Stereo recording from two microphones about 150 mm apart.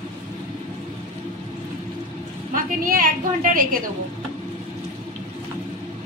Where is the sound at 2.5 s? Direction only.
65° right (ahead or behind).